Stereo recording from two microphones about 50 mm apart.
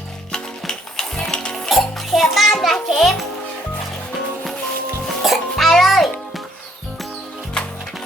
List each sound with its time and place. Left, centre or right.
0.3 s music: centre
1.7 s music: centre
5.0 s music: centre